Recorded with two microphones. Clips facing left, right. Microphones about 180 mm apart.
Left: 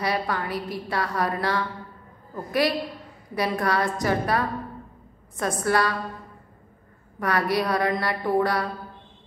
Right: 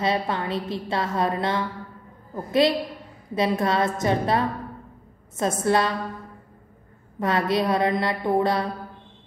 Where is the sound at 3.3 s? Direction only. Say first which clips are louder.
Right 2 dB; 25° right (ahead or behind).